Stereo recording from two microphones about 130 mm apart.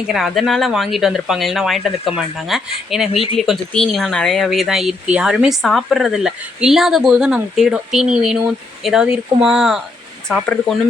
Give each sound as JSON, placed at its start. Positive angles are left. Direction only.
{"t": 0.1, "sound": "speech", "side_deg": 0}
{"t": 3.1, "sound": "speech", "side_deg": 45}
{"t": 3.3, "sound": "speech", "side_deg": 0}
{"t": 10.2, "sound": "speech", "side_deg": 5}